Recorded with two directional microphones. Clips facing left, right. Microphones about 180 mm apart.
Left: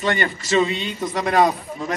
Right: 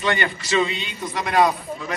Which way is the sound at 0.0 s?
45° left (ahead or behind).